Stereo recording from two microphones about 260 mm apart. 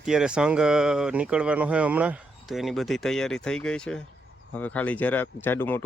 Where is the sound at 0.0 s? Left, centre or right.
Centre.